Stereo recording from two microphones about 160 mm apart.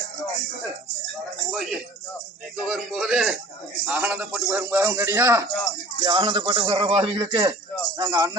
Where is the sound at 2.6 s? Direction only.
Centre (ahead or behind).